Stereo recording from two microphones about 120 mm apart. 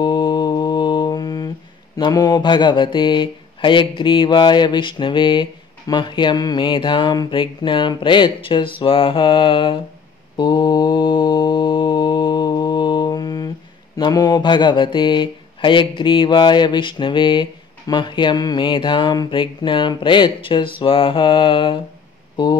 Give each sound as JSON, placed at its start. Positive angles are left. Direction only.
{"t": 0.0, "sound": "mantra", "side_deg": 40}
{"t": 2.0, "sound": "speech", "side_deg": 35}
{"t": 10.3, "sound": "mantra", "side_deg": 40}
{"t": 13.9, "sound": "speech", "side_deg": 35}